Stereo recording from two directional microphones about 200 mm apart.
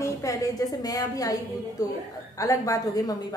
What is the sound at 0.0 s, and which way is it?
A woman's voice, 15° left (ahead or behind).